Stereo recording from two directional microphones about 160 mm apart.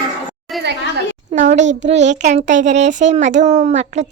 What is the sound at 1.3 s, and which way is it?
A child's voice, 50° right (ahead or behind).